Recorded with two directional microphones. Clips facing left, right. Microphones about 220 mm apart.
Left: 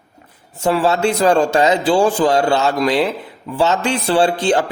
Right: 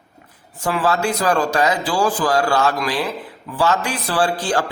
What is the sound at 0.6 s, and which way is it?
A man's voice, 25° left (ahead or behind).